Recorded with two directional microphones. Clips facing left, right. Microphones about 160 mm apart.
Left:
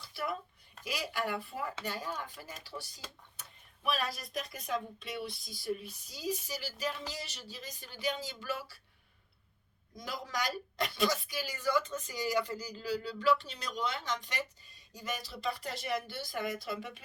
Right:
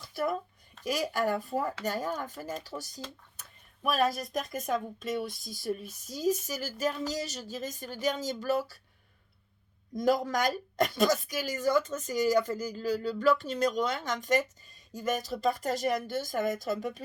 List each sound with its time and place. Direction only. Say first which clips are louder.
0.0 s a sound: right 7 dB; 45° right (ahead or behind)
0.9 s a woman's voice: right 7 dB; 45° right (ahead or behind)
9.9 s a woman's voice: right 13 dB; 50° right (ahead or behind)